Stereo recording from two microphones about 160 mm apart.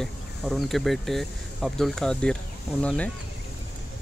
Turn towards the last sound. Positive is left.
turn(degrees=10)  # may be behind; listen again after turning